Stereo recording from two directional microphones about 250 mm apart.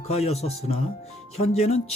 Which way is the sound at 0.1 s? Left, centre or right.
Left.